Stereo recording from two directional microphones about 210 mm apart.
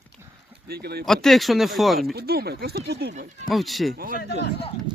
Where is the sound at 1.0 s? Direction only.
Centre (ahead or behind).